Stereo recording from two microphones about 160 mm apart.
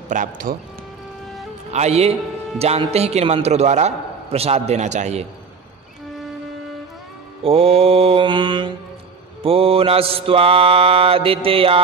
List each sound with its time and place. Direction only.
0.1 s speech: 55° right (ahead or behind)
1.7 s mantra: 45° right (ahead or behind)
7.4 s mantra: 40° right (ahead or behind)